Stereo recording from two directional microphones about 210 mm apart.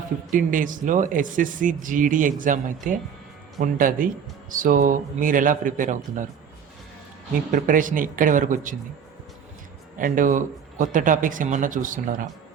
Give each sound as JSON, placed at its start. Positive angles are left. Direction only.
{"t": 0.3, "sound": "speech", "side_deg": -40}
{"t": 7.5, "sound": "speech", "side_deg": -40}
{"t": 10.0, "sound": "speech", "side_deg": -40}